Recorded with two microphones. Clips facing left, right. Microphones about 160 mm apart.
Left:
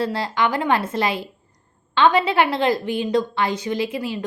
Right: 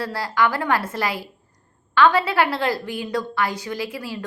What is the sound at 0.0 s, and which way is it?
A woman's voice, 20° left (ahead or behind).